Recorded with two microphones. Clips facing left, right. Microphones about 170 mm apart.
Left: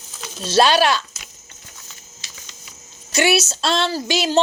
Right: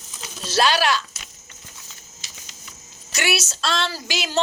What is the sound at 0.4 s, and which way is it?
Speech, 30° left (ahead or behind).